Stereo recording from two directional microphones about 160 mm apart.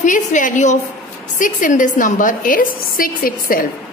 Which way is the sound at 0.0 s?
50° left (ahead or behind).